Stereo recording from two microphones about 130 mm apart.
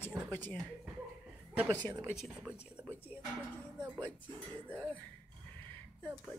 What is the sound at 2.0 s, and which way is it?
Speech, 5° right (ahead or behind).